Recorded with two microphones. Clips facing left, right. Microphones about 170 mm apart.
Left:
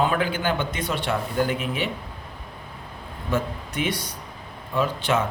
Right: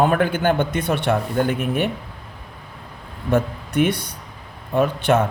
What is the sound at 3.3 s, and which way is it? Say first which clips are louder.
A man's voice: right 6 dB; 55° right (ahead or behind).